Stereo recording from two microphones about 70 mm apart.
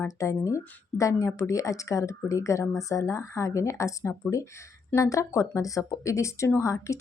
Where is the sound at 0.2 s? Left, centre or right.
Left.